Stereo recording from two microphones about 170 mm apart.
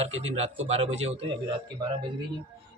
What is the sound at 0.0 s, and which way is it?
Speech, 40° right (ahead or behind).